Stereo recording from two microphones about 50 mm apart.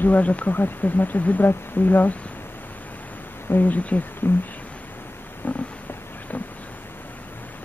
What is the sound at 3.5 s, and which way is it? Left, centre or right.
Speech, left.